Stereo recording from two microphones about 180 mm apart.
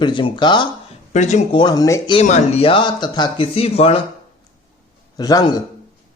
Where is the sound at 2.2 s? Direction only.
35° left (ahead or behind).